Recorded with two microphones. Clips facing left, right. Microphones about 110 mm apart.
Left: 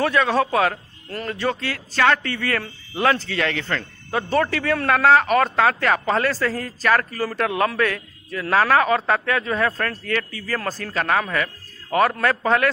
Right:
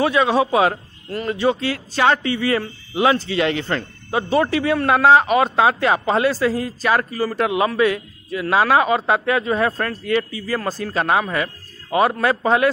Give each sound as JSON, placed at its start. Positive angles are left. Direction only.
{"t": 0.0, "sound": "speech", "side_deg": -15}